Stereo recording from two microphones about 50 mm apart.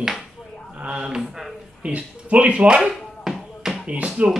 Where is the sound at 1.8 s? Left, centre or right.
Right.